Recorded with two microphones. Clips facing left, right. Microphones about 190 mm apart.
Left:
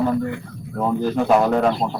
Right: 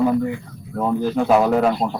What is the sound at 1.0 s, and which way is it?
Speech, centre (ahead or behind).